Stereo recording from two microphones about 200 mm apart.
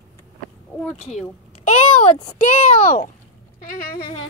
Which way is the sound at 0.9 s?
35° left (ahead or behind).